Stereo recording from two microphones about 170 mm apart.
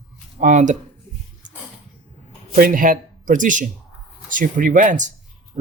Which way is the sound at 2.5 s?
55° right (ahead or behind).